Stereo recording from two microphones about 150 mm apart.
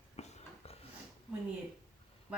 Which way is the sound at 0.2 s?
45° left (ahead or behind).